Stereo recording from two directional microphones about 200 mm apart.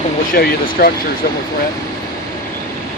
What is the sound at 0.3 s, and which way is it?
Speech, 50° left (ahead or behind).